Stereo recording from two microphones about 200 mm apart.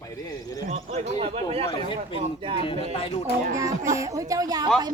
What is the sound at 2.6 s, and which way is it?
Speech, 30° left (ahead or behind).